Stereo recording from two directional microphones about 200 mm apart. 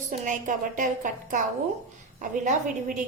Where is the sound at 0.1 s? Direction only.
40° right (ahead or behind).